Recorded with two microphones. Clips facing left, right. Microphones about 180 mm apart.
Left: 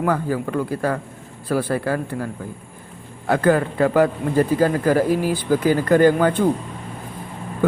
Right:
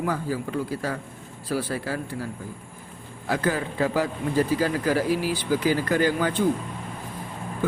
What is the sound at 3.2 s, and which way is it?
A man's voice, 55° left (ahead or behind).